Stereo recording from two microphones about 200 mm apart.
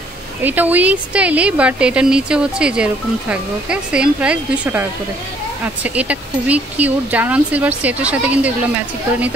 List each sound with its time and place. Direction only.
0.4 s speech: 10° right (ahead or behind)
5.9 s speech: 5° right (ahead or behind)